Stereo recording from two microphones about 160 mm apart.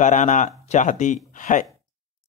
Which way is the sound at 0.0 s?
50° left (ahead or behind).